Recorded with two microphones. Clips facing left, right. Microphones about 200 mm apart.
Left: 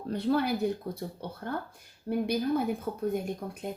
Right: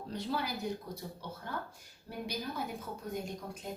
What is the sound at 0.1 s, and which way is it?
Speech, 55° left (ahead or behind).